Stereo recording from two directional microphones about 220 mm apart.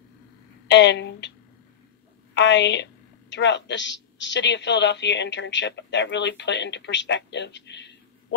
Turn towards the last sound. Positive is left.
turn(degrees=50)  # may be behind; listen again after turning